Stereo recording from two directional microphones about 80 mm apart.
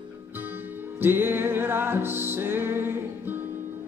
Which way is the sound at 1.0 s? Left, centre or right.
Right.